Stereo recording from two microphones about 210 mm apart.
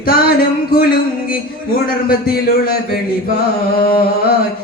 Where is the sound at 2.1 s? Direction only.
45° left (ahead or behind).